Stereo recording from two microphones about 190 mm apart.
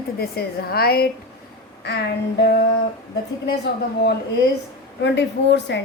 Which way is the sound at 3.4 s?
60° left (ahead or behind).